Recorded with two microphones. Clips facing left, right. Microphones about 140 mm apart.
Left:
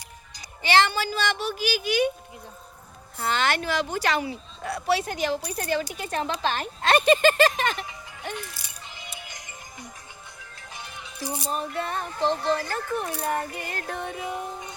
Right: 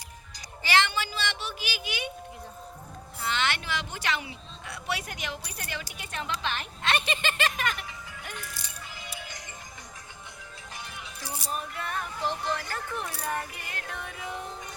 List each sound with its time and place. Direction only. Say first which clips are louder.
0.6 s speech: left 5 dB; 35° left (ahead or behind)
3.2 s speech: left 5 dB; 40° left (ahead or behind)
8.9 s music: left 1 dB; 20° left (ahead or behind)
11.2 s music: left 6 dB; 20° left (ahead or behind)
13.6 s speech: left 7 dB; 40° left (ahead or behind)